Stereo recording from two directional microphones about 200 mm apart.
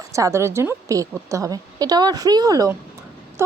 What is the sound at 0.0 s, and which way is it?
A woman's voice, 15° right (ahead or behind).